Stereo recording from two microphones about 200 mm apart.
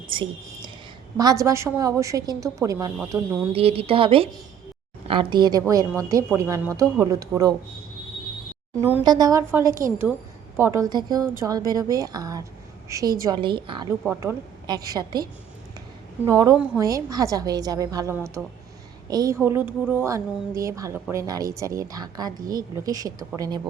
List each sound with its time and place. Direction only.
0.1 s whispering: 25° right (ahead or behind)
1.2 s a woman's voice: 15° right (ahead or behind)
3.5 s a woman's voice: 30° right (ahead or behind)
9.0 s a woman's voice: 20° right (ahead or behind)
14.0 s a woman's voice: 10° right (ahead or behind)
14.8 s a woman's voice: 20° right (ahead or behind)
16.2 s a woman's voice: 15° right (ahead or behind)